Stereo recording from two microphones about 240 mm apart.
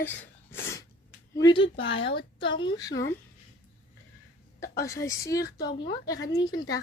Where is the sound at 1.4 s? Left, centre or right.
Centre.